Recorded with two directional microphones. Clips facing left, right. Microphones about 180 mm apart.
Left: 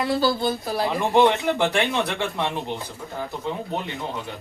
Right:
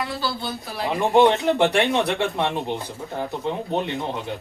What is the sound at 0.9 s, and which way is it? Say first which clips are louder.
A man's voice: right 3 dB; 15° right (ahead or behind).